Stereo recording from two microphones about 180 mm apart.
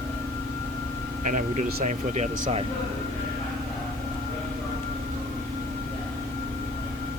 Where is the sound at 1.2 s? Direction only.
45° right (ahead or behind).